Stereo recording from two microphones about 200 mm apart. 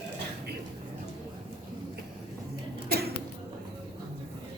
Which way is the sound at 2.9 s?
50° right (ahead or behind).